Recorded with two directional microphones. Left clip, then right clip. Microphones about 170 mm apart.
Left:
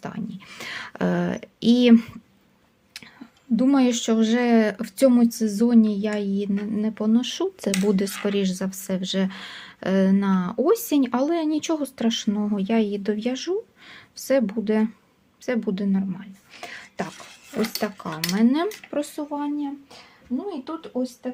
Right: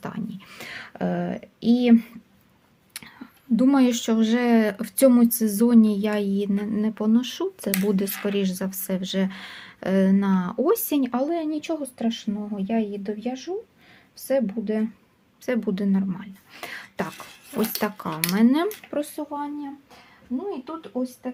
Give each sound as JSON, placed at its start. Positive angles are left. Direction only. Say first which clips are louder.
{"t": 0.0, "sound": "whispering", "louder": "even", "side_deg": 0}
{"t": 2.9, "sound": "speech", "louder": "right 1 dB", "side_deg": -5}
{"t": 15.4, "sound": "speech", "louder": "even", "side_deg": 0}
{"t": 19.1, "sound": "speech", "louder": "left 2 dB", "side_deg": 10}